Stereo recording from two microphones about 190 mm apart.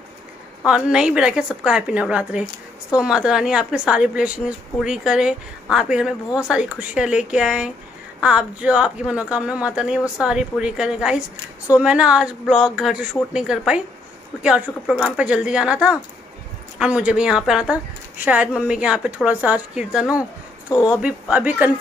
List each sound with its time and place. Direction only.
0.7 s a woman's voice: 5° right (ahead or behind)
20.7 s speech: 20° left (ahead or behind)
21.0 s speech: 5° right (ahead or behind)